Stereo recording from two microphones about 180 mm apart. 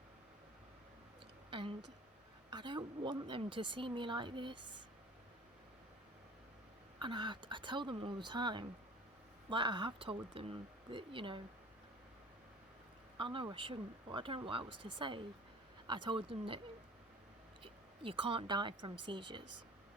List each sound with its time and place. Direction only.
1.5 s a sound: 30° right (ahead or behind)
2.5 s a woman's voice: 25° right (ahead or behind)
7.0 s a woman's voice: 25° right (ahead or behind)
13.1 s a woman's voice: 25° right (ahead or behind)
17.6 s a woman's voice: 30° right (ahead or behind)